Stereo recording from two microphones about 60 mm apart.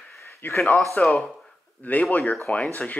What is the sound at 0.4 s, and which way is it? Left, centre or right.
Speech, left.